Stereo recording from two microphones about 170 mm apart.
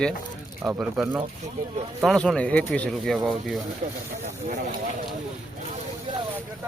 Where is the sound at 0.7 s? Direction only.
5° right (ahead or behind).